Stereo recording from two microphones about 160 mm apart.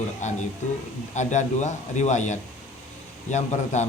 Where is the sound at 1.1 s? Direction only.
50° left (ahead or behind).